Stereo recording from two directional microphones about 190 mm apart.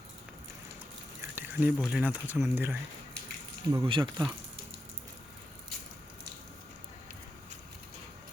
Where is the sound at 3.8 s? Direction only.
25° right (ahead or behind).